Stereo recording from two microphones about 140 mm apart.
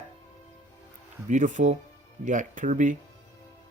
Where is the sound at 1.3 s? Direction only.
65° right (ahead or behind).